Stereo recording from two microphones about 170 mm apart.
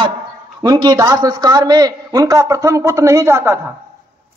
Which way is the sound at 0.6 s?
25° right (ahead or behind).